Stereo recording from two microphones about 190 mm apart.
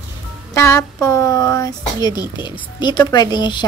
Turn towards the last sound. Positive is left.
turn(degrees=25)  # may be behind; listen again after turning